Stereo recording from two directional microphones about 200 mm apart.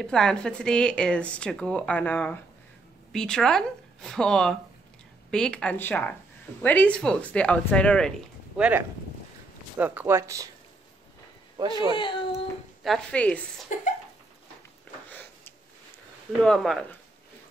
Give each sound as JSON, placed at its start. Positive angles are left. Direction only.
{"t": 0.0, "sound": "speech", "side_deg": 5}
{"t": 8.5, "sound": "speech", "side_deg": -5}
{"t": 11.5, "sound": "speech", "side_deg": -20}
{"t": 11.9, "sound": "speech", "side_deg": 25}
{"t": 12.8, "sound": "speech", "side_deg": 5}
{"t": 13.7, "sound": "cough", "side_deg": 40}
{"t": 15.0, "sound": "sniff", "side_deg": 10}
{"t": 16.4, "sound": "speech", "side_deg": 0}